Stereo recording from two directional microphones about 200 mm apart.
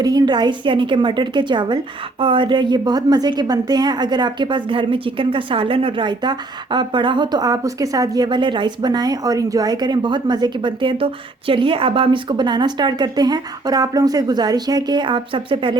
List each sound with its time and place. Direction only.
0.0 s a woman's voice: 20° right (ahead or behind)